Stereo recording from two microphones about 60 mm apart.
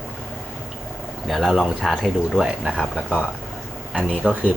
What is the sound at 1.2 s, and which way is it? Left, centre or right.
Speech, centre.